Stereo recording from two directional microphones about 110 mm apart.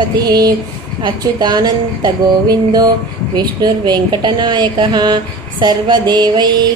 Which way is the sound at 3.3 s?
40° right (ahead or behind).